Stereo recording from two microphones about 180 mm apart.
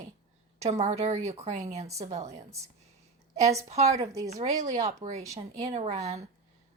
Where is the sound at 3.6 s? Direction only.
35° right (ahead or behind).